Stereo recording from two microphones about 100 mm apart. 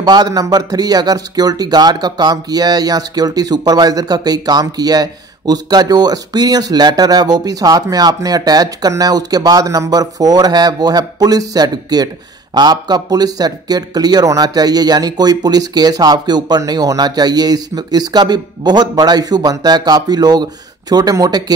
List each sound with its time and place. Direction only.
0.0 s speech: 40° right (ahead or behind)